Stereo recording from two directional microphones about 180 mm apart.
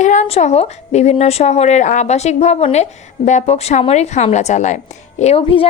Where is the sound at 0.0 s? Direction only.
40° left (ahead or behind).